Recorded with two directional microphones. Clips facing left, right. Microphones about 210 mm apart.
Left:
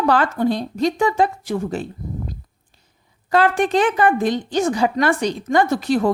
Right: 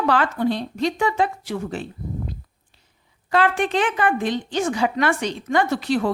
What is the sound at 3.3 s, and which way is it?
A woman's voice, 40° left (ahead or behind).